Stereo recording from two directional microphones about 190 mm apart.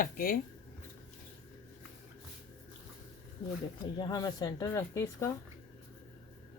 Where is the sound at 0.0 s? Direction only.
50° left (ahead or behind).